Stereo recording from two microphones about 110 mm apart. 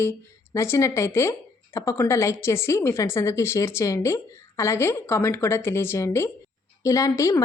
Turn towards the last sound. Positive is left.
turn(degrees=30)  # may be behind; listen again after turning